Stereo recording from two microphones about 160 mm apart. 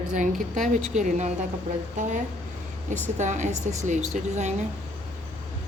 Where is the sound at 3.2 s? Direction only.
50° right (ahead or behind).